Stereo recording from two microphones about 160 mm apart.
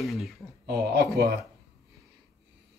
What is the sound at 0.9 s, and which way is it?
Speech, 85° right.